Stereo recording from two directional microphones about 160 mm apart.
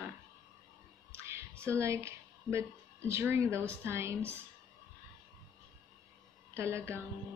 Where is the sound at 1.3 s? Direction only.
15° right (ahead or behind).